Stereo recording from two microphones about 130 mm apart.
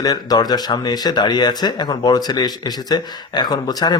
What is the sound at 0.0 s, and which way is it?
Speech, 30° left (ahead or behind).